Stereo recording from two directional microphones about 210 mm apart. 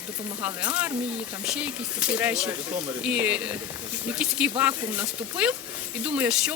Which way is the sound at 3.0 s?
5° right (ahead or behind).